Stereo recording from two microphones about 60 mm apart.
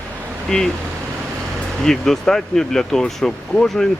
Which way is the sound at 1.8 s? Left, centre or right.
Centre.